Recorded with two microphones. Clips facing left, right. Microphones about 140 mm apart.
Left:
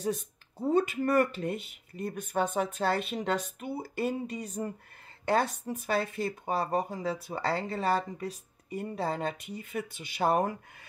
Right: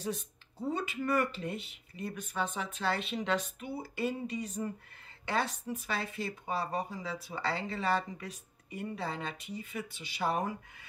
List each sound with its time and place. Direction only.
0.0 s speech: 50° left (ahead or behind)